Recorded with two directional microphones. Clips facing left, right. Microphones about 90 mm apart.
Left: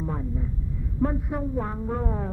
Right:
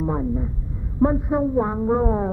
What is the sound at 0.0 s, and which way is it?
Speech, 30° right (ahead or behind).